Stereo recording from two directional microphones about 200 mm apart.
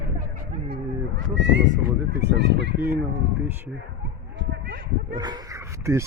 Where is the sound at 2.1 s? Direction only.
60° right (ahead or behind).